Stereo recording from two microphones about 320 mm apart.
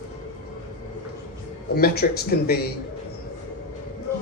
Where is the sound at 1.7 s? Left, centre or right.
Left.